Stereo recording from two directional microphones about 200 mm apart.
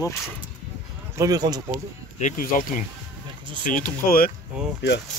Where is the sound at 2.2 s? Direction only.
40° left (ahead or behind).